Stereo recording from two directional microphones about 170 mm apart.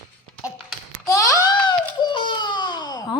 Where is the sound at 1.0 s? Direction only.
20° left (ahead or behind).